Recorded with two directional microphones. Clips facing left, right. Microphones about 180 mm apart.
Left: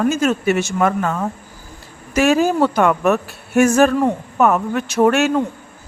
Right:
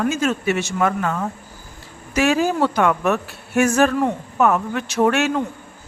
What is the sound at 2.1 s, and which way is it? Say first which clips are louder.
Speech: left 3 dB; 45° left (ahead or behind).